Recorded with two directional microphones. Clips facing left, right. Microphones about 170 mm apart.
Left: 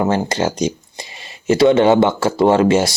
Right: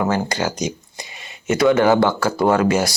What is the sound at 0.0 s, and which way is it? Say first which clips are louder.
Speech: left 3 dB; 25° left (ahead or behind).